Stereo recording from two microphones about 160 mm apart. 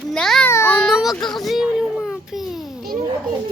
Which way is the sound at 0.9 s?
Centre (ahead or behind).